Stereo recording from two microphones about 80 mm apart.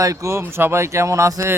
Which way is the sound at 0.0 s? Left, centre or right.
Right.